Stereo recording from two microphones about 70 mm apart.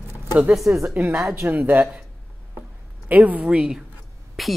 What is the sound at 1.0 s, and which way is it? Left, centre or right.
Speech, right.